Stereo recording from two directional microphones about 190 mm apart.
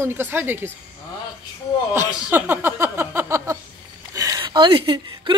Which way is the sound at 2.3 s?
10° right (ahead or behind).